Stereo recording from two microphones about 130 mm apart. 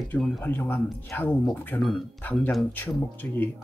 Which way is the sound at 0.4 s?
15° left (ahead or behind).